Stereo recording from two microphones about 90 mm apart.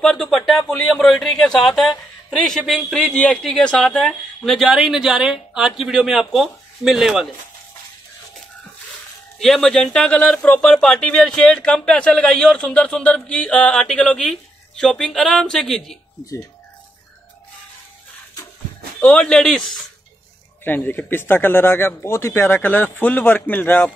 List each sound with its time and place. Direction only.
0.0 s a man's voice: 5° left (ahead or behind)
9.4 s speech: 5° left (ahead or behind)
18.9 s speech: 15° left (ahead or behind)
20.6 s speech: 20° left (ahead or behind)